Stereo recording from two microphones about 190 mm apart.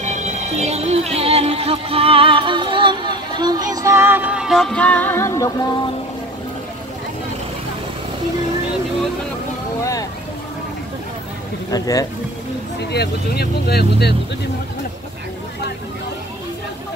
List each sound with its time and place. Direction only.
0.0 s speech: 35° right (ahead or behind); by 5.8 s 15° left (ahead or behind)
11.7 s speech: 20° left (ahead or behind)
12.9 s speech: 55° left (ahead or behind)